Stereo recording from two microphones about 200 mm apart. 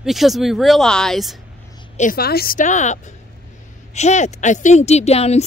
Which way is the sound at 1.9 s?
45° left (ahead or behind).